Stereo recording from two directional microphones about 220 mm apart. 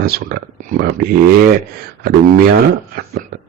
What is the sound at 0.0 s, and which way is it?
Speech, 45° right (ahead or behind).